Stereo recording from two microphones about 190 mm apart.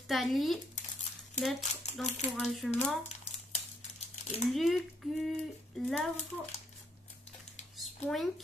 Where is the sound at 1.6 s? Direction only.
35° left (ahead or behind).